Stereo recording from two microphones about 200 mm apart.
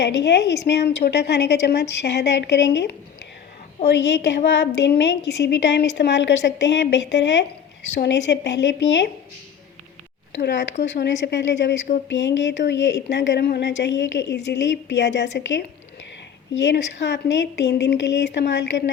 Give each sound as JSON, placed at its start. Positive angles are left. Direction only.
{"t": 0.0, "sound": "a woman's voice", "side_deg": 60}
{"t": 10.3, "sound": "a woman's voice", "side_deg": 60}